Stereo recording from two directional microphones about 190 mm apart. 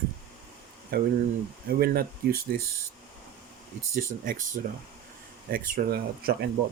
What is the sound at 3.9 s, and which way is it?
Speech, 50° right (ahead or behind).